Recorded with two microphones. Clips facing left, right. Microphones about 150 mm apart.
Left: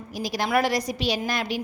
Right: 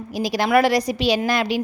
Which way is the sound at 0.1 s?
80° right.